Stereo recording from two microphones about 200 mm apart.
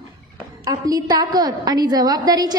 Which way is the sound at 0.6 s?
20° right (ahead or behind).